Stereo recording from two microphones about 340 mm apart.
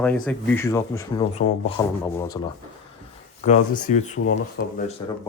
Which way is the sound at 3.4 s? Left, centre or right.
Left.